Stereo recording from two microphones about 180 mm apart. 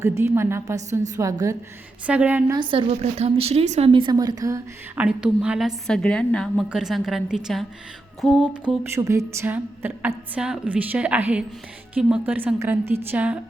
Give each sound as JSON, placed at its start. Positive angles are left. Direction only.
{"t": 0.0, "sound": "a woman's voice", "side_deg": -15}
{"t": 2.5, "sound": "speech", "side_deg": -25}
{"t": 4.9, "sound": "a woman's voice", "side_deg": -5}